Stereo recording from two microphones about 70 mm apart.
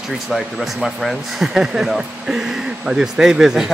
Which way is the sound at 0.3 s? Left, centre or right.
Centre.